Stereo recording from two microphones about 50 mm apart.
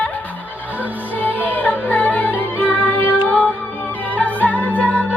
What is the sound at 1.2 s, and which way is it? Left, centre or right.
Music, left.